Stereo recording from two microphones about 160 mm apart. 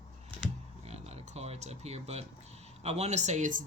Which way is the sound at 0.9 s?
40° right (ahead or behind).